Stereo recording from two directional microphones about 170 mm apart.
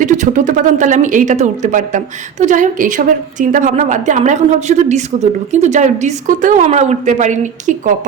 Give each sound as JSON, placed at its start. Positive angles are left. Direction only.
{"t": 0.0, "sound": "a woman's voice", "side_deg": -50}